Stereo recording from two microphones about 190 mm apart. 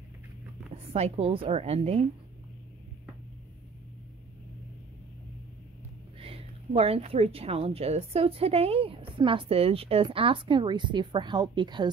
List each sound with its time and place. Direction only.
0.9 s a woman's voice: 35° right (ahead or behind)
6.1 s a woman's voice: 30° right (ahead or behind)